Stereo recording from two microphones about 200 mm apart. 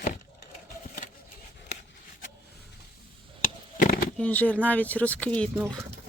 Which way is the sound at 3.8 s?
45° left (ahead or behind).